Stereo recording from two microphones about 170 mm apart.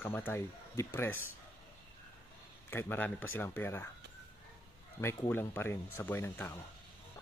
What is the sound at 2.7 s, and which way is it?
Speech, 10° left (ahead or behind).